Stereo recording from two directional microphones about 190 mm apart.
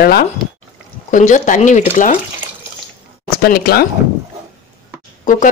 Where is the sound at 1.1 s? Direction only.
40° left (ahead or behind).